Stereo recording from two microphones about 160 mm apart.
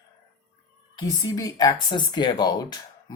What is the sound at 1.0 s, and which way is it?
A woman's voice, 20° left (ahead or behind).